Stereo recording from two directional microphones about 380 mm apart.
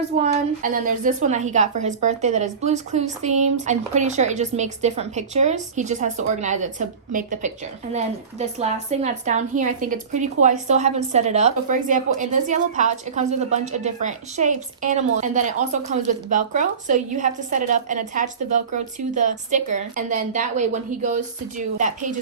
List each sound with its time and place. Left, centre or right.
0.2 s a woman's voice: right